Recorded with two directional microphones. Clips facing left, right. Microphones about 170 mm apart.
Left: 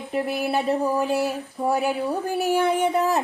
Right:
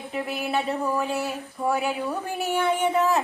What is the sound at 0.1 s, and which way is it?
Speech, 40° left (ahead or behind).